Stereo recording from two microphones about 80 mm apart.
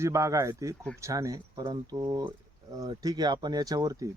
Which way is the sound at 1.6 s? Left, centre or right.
Right.